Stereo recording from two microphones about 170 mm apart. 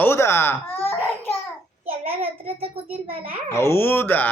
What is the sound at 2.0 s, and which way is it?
Child singing, 35° right (ahead or behind).